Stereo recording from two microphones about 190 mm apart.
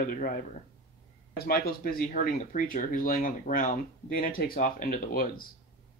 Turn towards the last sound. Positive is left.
turn(degrees=50)  # may be behind; listen again after turning